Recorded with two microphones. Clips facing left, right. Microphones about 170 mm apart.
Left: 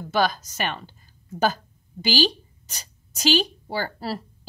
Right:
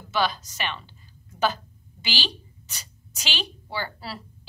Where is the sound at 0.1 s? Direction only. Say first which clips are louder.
Left 3 dB; 45° left (ahead or behind).